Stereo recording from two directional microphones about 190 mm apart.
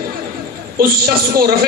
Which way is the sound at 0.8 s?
50° right (ahead or behind).